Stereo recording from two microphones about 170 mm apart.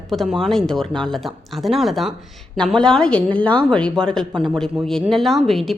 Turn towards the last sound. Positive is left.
turn(degrees=0)  # may be behind; listen again after turning